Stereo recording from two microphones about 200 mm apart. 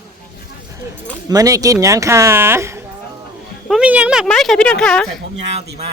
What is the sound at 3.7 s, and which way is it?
A man's voice, 5° right (ahead or behind).